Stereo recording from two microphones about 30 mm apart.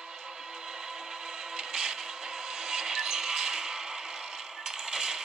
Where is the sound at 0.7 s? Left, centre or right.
Right.